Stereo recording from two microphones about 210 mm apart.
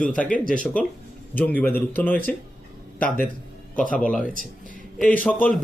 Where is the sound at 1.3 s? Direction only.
10° left (ahead or behind).